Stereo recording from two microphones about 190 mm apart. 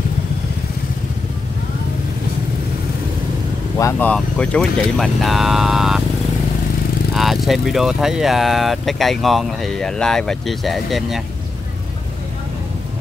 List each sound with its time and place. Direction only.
3.7 s speech: 15° left (ahead or behind)
4.1 s speech: 5° left (ahead or behind)
7.2 s speech: centre (ahead or behind)